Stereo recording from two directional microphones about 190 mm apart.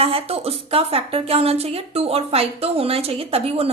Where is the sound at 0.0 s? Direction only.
30° right (ahead or behind).